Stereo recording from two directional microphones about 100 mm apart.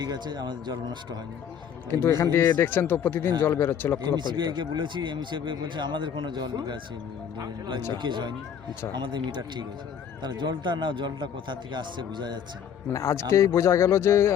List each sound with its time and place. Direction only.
0.0 s a man's voice: 45° right (ahead or behind)
2.0 s speech: 30° left (ahead or behind)
4.0 s a man's voice: 45° right (ahead or behind)
12.9 s speech: 30° left (ahead or behind)